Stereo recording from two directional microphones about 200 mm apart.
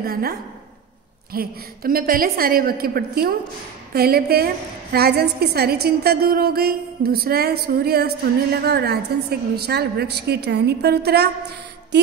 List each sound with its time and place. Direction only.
0.0 s a woman's voice: 50° right (ahead or behind)